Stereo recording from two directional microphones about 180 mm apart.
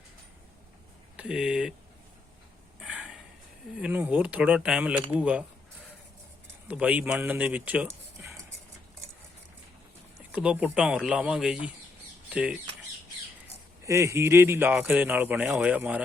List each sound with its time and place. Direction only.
1.1 s speech: 5° right (ahead or behind)
2.8 s a sound: 5° right (ahead or behind)
3.8 s a man's voice: 10° right (ahead or behind)
6.7 s speech: 5° right (ahead or behind)
10.3 s speech: 5° right (ahead or behind)
13.8 s a man's voice: 15° right (ahead or behind)